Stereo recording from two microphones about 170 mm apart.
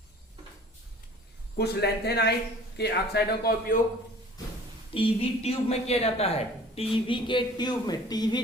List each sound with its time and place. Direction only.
1.5 s speech: 70° left (ahead or behind)
4.9 s a woman's voice: 35° left (ahead or behind)